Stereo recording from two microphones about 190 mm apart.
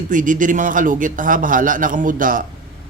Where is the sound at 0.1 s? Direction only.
45° right (ahead or behind).